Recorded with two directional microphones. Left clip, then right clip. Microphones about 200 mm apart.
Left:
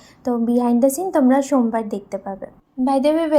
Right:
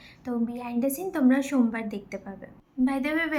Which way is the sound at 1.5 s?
90° left.